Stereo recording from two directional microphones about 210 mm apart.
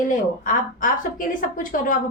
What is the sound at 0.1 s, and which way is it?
A woman's voice, 40° left (ahead or behind).